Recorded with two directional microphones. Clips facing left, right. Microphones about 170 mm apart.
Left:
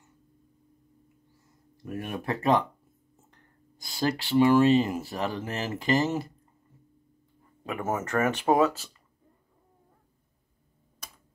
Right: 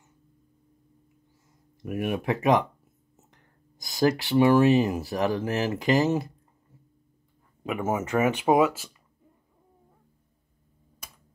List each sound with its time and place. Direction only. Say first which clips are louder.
1.8 s speech: right 6 dB; 15° right (ahead or behind)
3.8 s speech: right 5 dB; 15° right (ahead or behind)
7.6 s speech: right 3 dB; 5° right (ahead or behind)